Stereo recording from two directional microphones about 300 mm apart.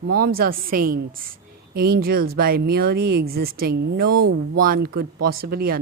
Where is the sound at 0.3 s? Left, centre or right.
Right.